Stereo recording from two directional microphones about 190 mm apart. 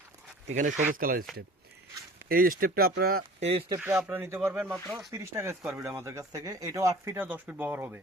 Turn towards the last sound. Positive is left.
turn(degrees=-10)  # may be behind; listen again after turning